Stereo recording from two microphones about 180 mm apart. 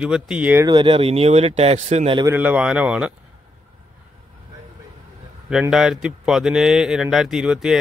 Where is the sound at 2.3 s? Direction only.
10° right (ahead or behind).